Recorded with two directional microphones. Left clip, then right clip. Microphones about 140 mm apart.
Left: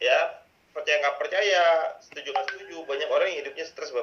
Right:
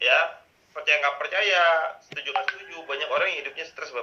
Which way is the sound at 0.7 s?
35° left (ahead or behind).